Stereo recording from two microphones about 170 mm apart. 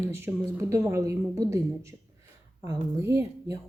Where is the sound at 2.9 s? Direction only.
15° right (ahead or behind).